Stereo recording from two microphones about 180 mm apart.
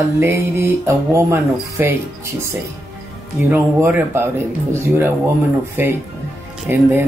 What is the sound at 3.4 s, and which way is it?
Music, 10° right (ahead or behind).